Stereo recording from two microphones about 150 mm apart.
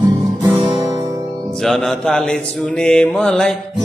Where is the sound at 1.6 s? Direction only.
Centre (ahead or behind).